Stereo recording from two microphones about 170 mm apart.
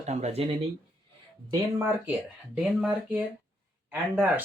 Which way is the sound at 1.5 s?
15° right (ahead or behind).